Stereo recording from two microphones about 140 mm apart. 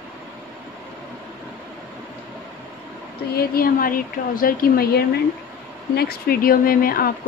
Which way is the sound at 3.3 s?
90° left.